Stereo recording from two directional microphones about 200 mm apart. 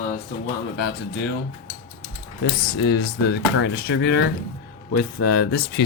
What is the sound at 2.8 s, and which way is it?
Speech, 55° left (ahead or behind).